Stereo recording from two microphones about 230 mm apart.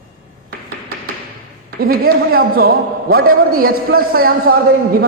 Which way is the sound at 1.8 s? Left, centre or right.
Right.